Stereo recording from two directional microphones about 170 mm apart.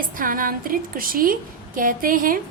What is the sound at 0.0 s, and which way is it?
A woman's voice, 55° right (ahead or behind).